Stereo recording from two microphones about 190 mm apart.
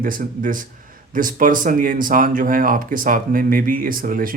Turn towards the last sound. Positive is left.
turn(degrees=-45)  # may be behind; listen again after turning